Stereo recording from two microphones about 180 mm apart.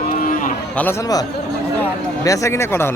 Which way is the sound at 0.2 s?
50° left (ahead or behind).